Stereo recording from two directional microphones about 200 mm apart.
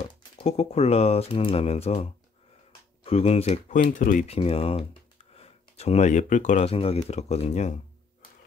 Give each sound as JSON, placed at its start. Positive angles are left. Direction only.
{"t": 0.1, "sound": "speech", "side_deg": 30}
{"t": 4.4, "sound": "speech", "side_deg": 30}